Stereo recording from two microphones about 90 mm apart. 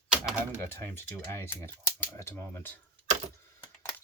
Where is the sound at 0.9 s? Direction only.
25° left (ahead or behind).